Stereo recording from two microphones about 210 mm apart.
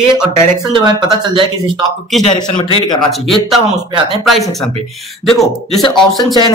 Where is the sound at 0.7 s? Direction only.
20° right (ahead or behind).